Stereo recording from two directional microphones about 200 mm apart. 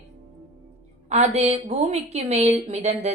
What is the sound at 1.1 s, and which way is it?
A woman's voice, 30° right (ahead or behind).